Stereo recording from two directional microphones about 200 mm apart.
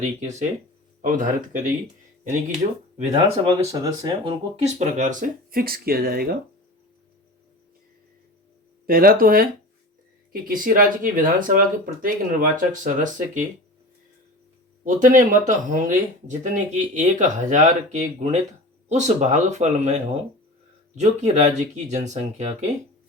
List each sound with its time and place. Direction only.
0.0 s speech: 35° right (ahead or behind)
3.8 s speech: 20° right (ahead or behind); by 6.3 s 50° right (ahead or behind)
8.9 s speech: 45° right (ahead or behind)
14.8 s speech: 40° right (ahead or behind)